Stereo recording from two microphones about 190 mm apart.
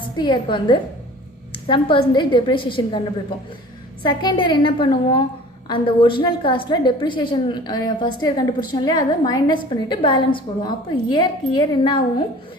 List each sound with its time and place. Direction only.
0.2 s a woman's voice: 25° left (ahead or behind)
4.0 s a woman's voice: 25° left (ahead or behind)